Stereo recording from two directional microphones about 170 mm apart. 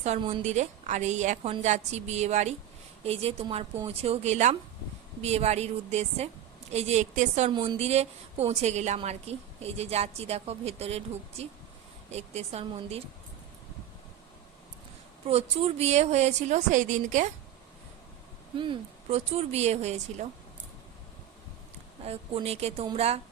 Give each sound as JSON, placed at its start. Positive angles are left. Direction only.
{"t": 0.4, "sound": "a woman's voice", "side_deg": -45}
{"t": 15.3, "sound": "a woman's voice", "side_deg": -35}
{"t": 18.5, "sound": "a woman's voice", "side_deg": -30}
{"t": 22.0, "sound": "a woman's voice", "side_deg": -35}